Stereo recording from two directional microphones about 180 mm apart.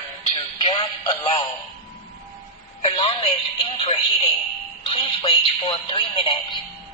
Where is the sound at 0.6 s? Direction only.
25° left (ahead or behind).